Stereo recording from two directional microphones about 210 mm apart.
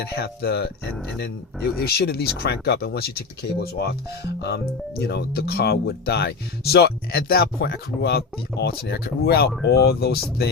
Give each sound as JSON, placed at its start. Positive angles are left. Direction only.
{"t": 0.0, "sound": "speech", "side_deg": 50}
{"t": 1.8, "sound": "speech", "side_deg": 50}